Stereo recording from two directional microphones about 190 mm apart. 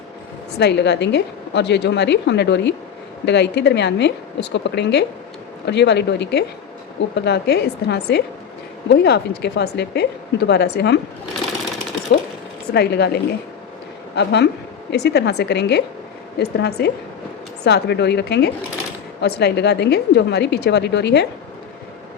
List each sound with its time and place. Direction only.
0.6 s a woman's voice: 65° left (ahead or behind)
12.1 s a woman's voice: 60° left (ahead or behind)